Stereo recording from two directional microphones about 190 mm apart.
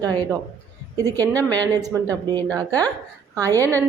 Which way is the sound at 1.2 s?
10° left (ahead or behind).